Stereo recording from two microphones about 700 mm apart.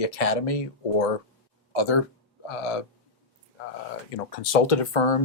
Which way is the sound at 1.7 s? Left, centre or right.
Left.